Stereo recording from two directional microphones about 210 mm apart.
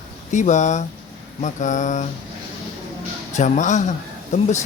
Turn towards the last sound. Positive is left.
turn(degrees=35)  # may be behind; listen again after turning